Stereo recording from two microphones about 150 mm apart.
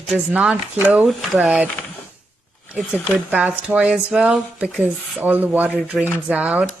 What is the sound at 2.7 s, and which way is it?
Speech, 5° right (ahead or behind).